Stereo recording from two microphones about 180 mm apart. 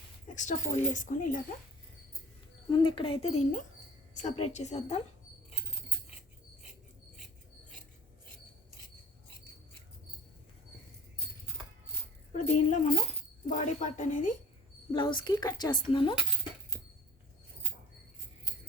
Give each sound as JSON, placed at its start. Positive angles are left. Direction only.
{"t": 0.3, "sound": "speech", "side_deg": 45}
{"t": 2.6, "sound": "speech", "side_deg": 25}
{"t": 12.4, "sound": "speech", "side_deg": 40}
{"t": 14.9, "sound": "a woman's voice", "side_deg": 25}